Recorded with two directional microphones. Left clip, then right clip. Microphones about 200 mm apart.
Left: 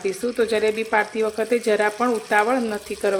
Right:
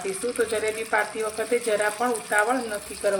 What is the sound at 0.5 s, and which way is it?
Speech, 50° left (ahead or behind).